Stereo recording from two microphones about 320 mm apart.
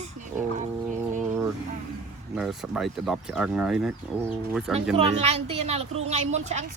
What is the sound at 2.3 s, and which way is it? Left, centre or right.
Speech, centre.